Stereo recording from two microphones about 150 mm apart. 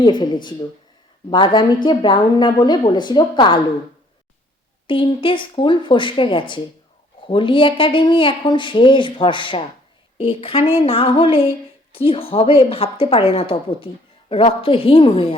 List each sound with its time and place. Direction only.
0.0 s a woman's voice: 30° left (ahead or behind)
4.9 s a woman's voice: 35° left (ahead or behind)